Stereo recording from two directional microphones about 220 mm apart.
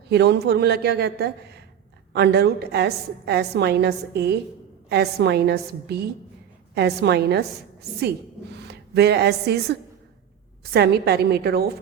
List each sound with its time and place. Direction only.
0.1 s a woman's voice: 50° right (ahead or behind)
8.5 s a woman's voice: 50° right (ahead or behind)